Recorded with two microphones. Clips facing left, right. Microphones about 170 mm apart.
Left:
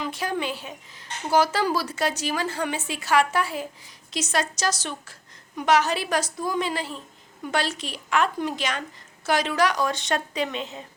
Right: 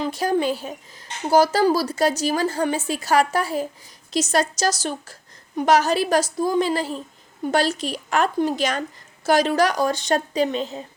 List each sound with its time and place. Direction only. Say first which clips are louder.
0.0 s speech: right 7 dB; 40° right (ahead or behind)